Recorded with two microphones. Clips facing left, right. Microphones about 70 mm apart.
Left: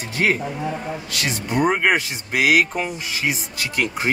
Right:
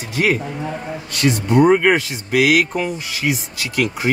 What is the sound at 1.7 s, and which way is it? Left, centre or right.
Speech, centre.